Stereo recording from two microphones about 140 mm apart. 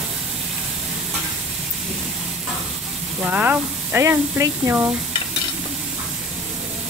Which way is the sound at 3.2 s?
10° right (ahead or behind).